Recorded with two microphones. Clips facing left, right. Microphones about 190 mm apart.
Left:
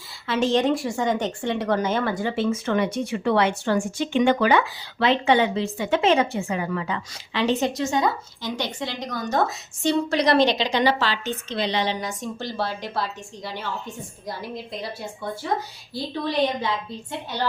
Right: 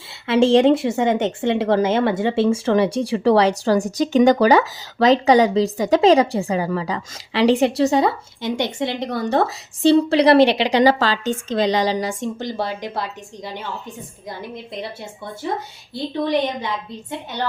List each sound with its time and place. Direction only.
0.3 s a woman's voice: 30° right (ahead or behind)
10.3 s a woman's voice: 65° right (ahead or behind)
10.8 s a woman's voice: 45° right (ahead or behind)
12.2 s a woman's voice: 20° right (ahead or behind)